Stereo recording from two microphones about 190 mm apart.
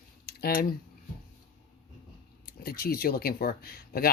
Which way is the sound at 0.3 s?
50° left (ahead or behind).